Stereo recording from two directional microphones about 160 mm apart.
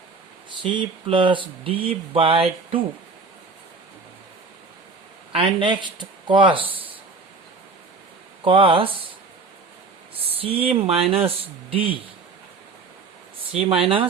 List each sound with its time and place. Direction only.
0.6 s speech: 30° right (ahead or behind)
5.3 s speech: 35° right (ahead or behind)
8.4 s speech: 30° right (ahead or behind)
10.3 s speech: 35° right (ahead or behind)
13.5 s speech: 35° right (ahead or behind)